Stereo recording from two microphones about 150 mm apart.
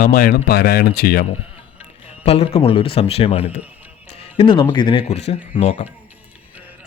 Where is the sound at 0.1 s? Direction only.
80° left.